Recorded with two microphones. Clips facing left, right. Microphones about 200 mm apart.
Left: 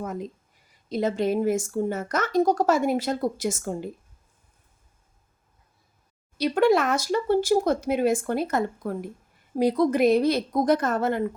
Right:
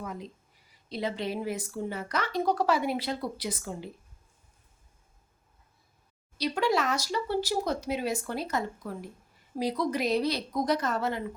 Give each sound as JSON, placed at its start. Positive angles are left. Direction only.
{"t": 0.0, "sound": "speech", "side_deg": 45}
{"t": 6.3, "sound": "speech", "side_deg": 55}